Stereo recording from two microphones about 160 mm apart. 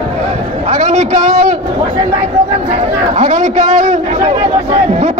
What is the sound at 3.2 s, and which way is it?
Speech, 45° right (ahead or behind).